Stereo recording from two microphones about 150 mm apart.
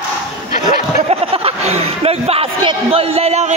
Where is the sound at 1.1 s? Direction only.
40° right (ahead or behind).